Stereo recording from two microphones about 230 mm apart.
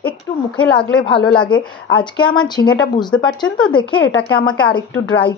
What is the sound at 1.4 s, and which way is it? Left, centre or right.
Speech, centre.